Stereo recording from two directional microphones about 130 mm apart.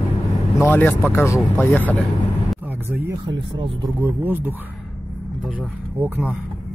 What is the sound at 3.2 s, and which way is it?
Speech, 35° right (ahead or behind).